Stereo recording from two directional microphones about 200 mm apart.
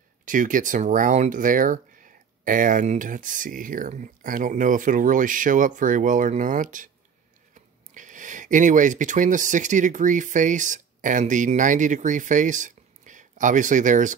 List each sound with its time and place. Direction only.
0.2 s speech: 40° right (ahead or behind)
7.9 s speech: 40° right (ahead or behind)